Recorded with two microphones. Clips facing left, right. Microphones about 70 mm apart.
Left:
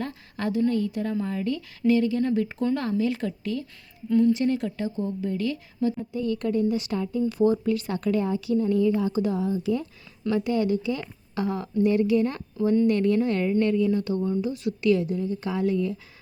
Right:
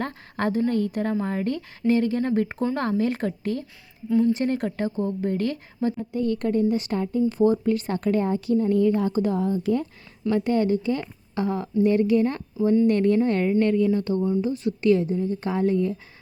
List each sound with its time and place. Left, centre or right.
0.0 s a sound: right
0.7 s speech: right
14.2 s speech: centre
14.4 s speech: right